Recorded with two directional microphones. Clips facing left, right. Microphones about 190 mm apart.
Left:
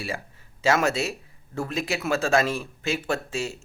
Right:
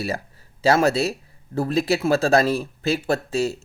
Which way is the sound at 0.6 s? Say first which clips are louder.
Right 5 dB; 35° right (ahead or behind).